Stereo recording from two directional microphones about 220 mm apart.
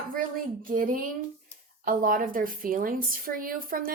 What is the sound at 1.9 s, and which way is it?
A woman's voice, 40° right (ahead or behind).